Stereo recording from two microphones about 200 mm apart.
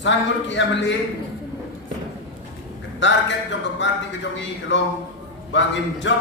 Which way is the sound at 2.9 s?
65° left (ahead or behind).